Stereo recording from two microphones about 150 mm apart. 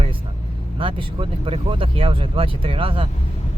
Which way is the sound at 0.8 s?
35° right (ahead or behind).